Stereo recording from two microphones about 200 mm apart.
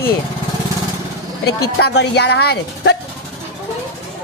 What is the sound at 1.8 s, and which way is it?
Speech, 55° left (ahead or behind).